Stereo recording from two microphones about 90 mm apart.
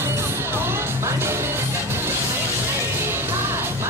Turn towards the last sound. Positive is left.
turn(degrees=-25)  # may be behind; listen again after turning